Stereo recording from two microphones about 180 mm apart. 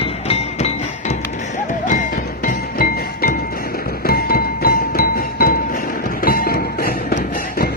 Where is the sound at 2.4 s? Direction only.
50° left (ahead or behind).